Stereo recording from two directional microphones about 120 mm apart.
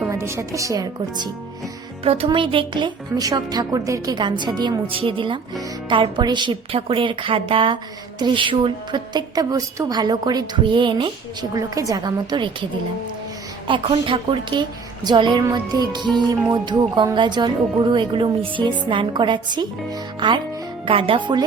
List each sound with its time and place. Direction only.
0.1 s a woman's voice: 25° right (ahead or behind)
2.0 s a woman's voice: 50° right (ahead or behind); by 4.8 s 35° right (ahead or behind)
4.9 s a woman's voice: 45° right (ahead or behind)
11.5 s a woman's voice: 30° right (ahead or behind)
13.7 s a woman's voice: 45° right (ahead or behind)